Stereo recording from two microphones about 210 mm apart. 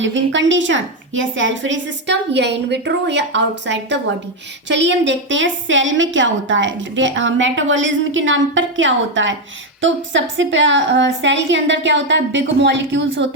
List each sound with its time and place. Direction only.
0.0 s a woman's voice: 60° right (ahead or behind)